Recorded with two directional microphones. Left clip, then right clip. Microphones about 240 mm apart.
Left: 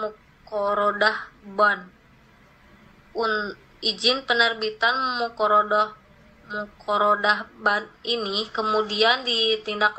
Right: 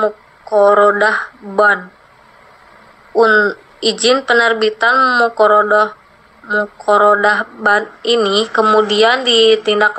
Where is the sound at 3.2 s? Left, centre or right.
Right.